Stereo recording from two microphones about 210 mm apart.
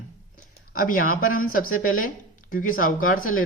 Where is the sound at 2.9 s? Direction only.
75° left (ahead or behind).